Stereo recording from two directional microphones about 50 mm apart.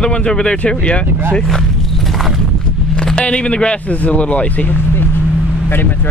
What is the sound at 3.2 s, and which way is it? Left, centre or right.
Speech, left.